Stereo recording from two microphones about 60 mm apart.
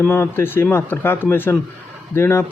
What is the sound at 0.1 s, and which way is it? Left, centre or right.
A man's voice, left.